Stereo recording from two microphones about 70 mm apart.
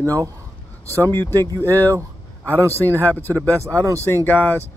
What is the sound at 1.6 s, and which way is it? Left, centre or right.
Speech, left.